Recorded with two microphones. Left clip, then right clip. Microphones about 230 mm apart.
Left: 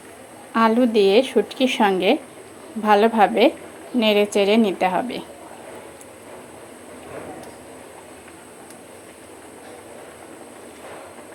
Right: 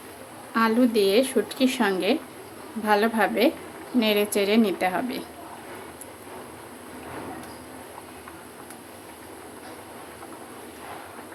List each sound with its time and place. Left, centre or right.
0.5 s a woman's voice: centre